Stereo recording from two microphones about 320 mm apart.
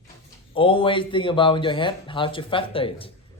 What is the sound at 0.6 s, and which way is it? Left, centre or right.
Speech, centre.